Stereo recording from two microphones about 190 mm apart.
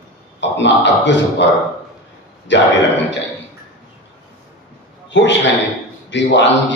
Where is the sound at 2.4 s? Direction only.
70° left (ahead or behind).